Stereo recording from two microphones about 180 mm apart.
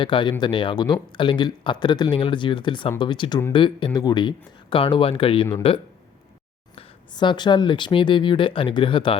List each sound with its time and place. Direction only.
0.0 s speech: 25° left (ahead or behind)
6.7 s speech: 25° left (ahead or behind)